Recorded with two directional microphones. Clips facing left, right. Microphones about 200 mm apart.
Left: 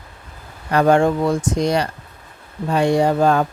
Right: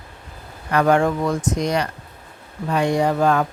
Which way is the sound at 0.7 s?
30° left (ahead or behind).